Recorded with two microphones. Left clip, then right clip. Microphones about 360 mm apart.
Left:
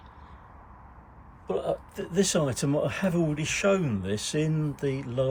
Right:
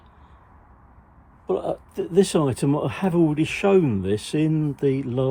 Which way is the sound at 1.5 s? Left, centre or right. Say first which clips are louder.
Right 4 dB; centre.